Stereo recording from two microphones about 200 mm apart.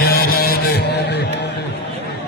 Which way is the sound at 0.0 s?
50° left (ahead or behind).